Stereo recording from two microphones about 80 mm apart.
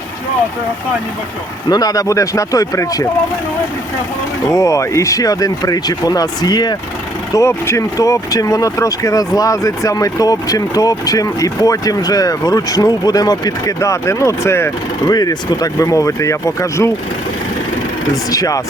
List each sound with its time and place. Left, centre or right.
1.7 s speech: left
4.4 s speech: left
7.3 s speech: left
15.0 s speech: left
18.3 s speech: left